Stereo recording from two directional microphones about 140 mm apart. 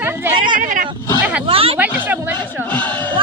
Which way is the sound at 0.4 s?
75° right (ahead or behind).